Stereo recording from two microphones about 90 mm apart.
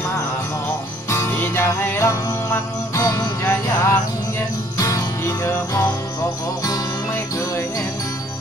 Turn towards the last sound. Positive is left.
turn(degrees=35)  # may be behind; listen again after turning